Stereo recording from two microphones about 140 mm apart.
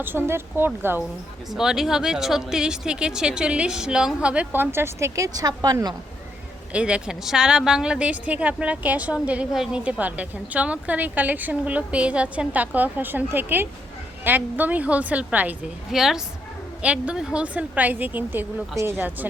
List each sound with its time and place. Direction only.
0.0 s a woman's voice: 15° right (ahead or behind)
1.5 s a woman's voice: 5° right (ahead or behind); by 5.9 s 25° right (ahead or behind)
6.7 s a woman's voice: 10° right (ahead or behind)